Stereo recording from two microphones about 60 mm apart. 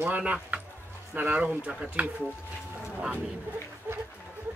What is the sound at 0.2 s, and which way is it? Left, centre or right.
Speech, right.